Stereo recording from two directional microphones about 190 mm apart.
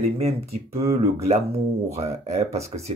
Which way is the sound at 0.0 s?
30° right (ahead or behind).